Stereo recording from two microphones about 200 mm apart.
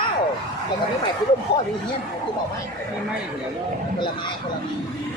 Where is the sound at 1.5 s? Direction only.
55° left (ahead or behind).